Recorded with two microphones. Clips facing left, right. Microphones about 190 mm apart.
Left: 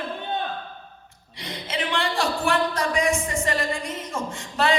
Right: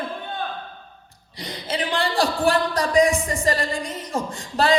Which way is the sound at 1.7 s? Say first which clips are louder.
Right 2 dB; 35° right (ahead or behind).